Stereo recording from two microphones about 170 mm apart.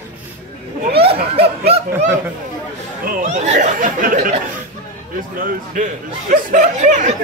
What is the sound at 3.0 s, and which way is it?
Speech, 45° right (ahead or behind).